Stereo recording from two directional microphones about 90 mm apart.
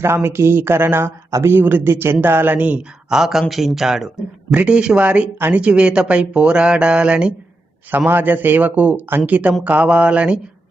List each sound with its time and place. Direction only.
0.0 s speech: 25° right (ahead or behind); by 10.4 s 10° right (ahead or behind)